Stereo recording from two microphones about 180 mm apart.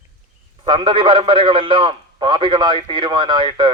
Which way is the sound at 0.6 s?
25° right (ahead or behind).